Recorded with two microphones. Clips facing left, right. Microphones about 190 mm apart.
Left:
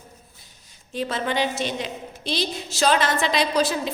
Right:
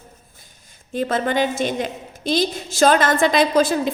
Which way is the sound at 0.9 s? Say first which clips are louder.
Right 5 dB; 50° right (ahead or behind).